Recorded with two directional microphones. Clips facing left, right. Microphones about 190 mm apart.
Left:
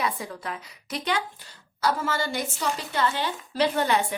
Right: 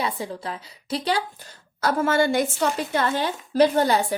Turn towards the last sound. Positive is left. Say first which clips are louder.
# right 4 dB
turn(degrees=-35)  # may be behind; listen again after turning